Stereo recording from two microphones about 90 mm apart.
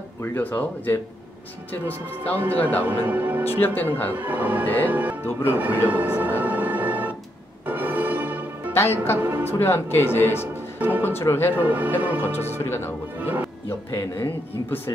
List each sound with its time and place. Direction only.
0.2 s speech: 20° left (ahead or behind)
3.1 s speech: 20° right (ahead or behind)
3.4 s speech: 25° left (ahead or behind)
4.2 s speech: 20° right (ahead or behind)
6.4 s music: 20° right (ahead or behind)
8.7 s speech: 25° left (ahead or behind)
9.2 s speech: 20° right (ahead or behind)
9.5 s speech: 25° left (ahead or behind)
11.5 s speech: 20° right (ahead or behind)
12.2 s speech: 25° left (ahead or behind)
13.2 s speech: 20° right (ahead or behind)
13.7 s speech: 30° left (ahead or behind)